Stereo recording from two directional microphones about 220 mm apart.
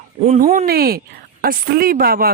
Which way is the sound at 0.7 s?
45° right (ahead or behind).